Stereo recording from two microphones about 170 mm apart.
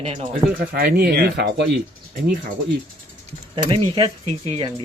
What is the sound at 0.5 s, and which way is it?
Speech, 60° right (ahead or behind).